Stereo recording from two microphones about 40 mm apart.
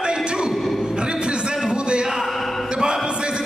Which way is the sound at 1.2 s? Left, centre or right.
Right.